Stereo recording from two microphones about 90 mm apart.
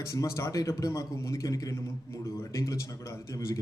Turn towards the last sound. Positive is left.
turn(degrees=35)  # may be behind; listen again after turning